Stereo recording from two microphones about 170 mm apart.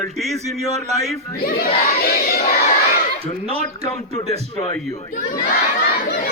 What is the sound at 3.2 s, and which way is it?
Speech, 35° right (ahead or behind).